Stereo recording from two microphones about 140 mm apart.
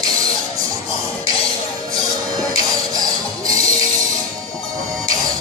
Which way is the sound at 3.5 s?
25° right (ahead or behind).